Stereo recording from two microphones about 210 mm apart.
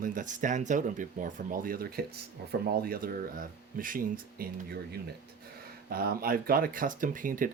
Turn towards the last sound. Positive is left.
turn(degrees=-40)  # may be behind; listen again after turning